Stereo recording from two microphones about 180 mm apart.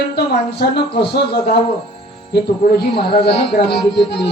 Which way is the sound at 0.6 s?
60° left (ahead or behind).